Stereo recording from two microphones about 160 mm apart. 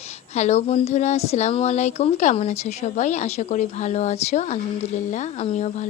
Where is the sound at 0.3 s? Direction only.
45° left (ahead or behind).